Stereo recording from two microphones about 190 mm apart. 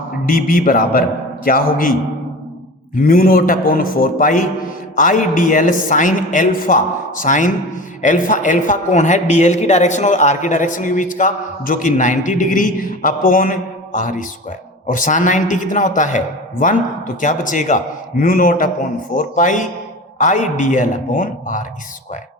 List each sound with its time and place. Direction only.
0.3 s a man's voice: 45° left (ahead or behind)